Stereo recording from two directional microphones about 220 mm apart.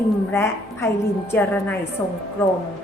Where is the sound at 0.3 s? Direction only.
10° left (ahead or behind).